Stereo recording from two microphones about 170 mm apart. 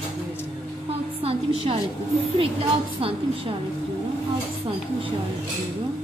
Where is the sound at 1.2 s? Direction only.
35° right (ahead or behind).